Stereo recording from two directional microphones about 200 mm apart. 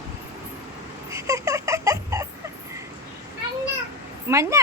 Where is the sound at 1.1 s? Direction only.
15° right (ahead or behind).